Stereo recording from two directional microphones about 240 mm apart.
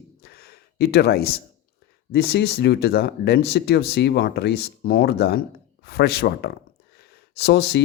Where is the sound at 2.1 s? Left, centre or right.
Left.